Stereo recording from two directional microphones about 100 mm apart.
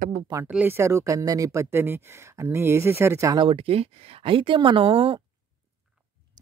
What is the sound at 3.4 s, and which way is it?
Speech, 65° right (ahead or behind).